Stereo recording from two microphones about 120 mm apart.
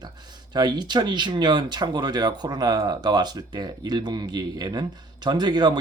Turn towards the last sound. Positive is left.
turn(degrees=-35)  # may be behind; listen again after turning